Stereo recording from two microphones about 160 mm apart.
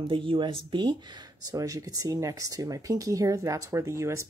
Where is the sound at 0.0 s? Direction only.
35° right (ahead or behind).